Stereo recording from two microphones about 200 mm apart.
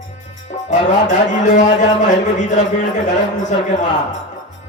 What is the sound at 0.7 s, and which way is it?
Music, 40° left (ahead or behind).